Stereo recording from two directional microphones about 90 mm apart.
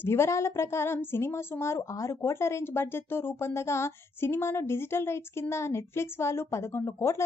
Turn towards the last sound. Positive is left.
turn(degrees=30)  # may be behind; listen again after turning